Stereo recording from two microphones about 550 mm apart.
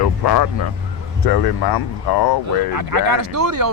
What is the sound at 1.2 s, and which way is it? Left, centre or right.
Speech, left.